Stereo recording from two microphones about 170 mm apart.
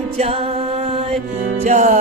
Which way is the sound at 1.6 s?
45° right (ahead or behind).